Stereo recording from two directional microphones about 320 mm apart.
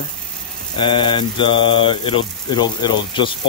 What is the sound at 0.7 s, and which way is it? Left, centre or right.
Mantra, centre.